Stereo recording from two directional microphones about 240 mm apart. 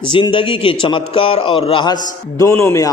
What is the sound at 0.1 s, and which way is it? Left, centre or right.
A man's voice, centre.